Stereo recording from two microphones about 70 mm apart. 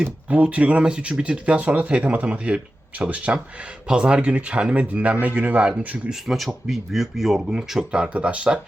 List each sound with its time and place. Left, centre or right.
0.0 s speech: centre
6.1 s speech: centre